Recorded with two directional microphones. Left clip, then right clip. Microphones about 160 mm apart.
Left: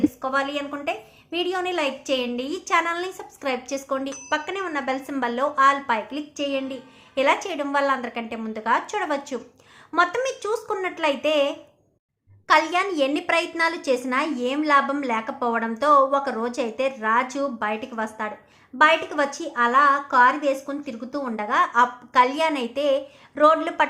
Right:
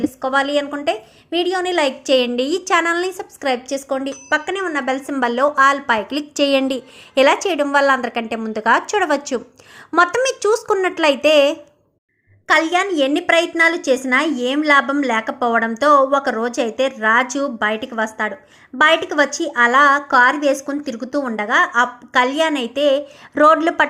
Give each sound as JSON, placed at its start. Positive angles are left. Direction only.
{"t": 0.0, "sound": "a woman's voice", "side_deg": -40}
{"t": 6.1, "sound": "a woman's voice", "side_deg": -60}
{"t": 12.5, "sound": "a woman's voice", "side_deg": -20}
{"t": 23.3, "sound": "a woman's voice", "side_deg": -40}